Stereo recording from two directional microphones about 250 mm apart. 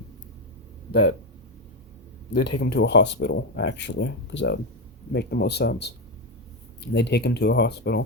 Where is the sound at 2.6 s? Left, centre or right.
Left.